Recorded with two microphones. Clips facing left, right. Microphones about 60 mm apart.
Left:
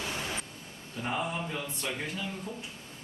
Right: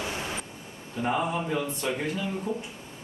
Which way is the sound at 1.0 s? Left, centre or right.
Centre.